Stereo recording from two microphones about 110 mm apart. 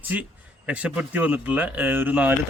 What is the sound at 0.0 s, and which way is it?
Speech, 15° right (ahead or behind).